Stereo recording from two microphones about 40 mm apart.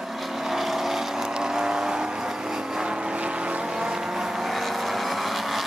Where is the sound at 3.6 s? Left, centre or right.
Centre.